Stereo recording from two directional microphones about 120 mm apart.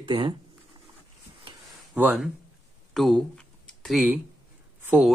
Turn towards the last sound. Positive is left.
turn(degrees=-15)  # may be behind; listen again after turning